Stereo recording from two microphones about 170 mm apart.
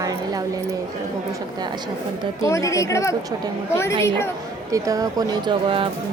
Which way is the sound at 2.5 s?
20° left (ahead or behind).